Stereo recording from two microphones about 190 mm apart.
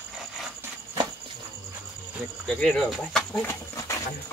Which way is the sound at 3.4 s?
15° left (ahead or behind).